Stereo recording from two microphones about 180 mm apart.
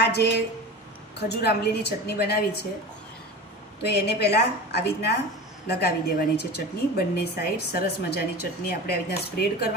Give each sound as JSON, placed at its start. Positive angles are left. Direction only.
{"t": 0.0, "sound": "a woman's voice", "side_deg": 70}
{"t": 1.4, "sound": "a woman's voice", "side_deg": 65}
{"t": 3.8, "sound": "a woman's voice", "side_deg": 65}